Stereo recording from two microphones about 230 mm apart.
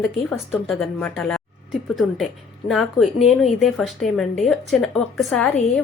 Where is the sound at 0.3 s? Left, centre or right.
Centre.